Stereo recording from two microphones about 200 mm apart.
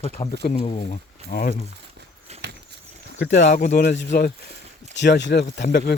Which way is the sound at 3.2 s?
40° left (ahead or behind).